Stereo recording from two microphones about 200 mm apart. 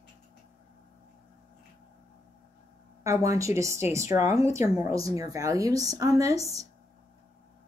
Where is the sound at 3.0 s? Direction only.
15° right (ahead or behind).